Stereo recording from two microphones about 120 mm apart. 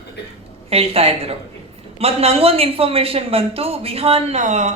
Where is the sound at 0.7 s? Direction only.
55° right (ahead or behind).